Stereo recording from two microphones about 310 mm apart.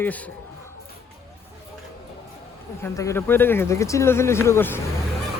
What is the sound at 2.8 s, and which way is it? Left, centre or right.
Speech, centre.